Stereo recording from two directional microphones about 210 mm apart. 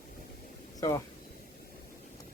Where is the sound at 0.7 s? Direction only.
15° left (ahead or behind).